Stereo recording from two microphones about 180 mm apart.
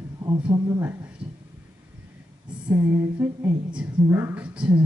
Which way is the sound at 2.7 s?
10° right (ahead or behind).